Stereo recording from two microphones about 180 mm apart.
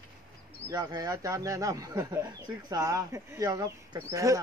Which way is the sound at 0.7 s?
20° right (ahead or behind).